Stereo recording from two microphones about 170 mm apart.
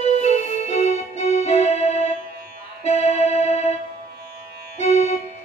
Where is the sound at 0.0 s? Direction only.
40° left (ahead or behind).